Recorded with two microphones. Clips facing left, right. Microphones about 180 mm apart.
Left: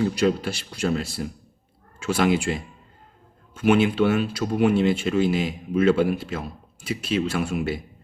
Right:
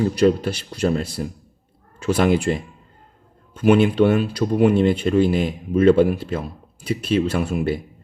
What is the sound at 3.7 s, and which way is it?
Speech, 45° right (ahead or behind).